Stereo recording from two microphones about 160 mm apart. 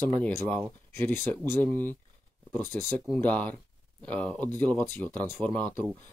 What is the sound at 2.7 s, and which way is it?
Speech, 10° left (ahead or behind).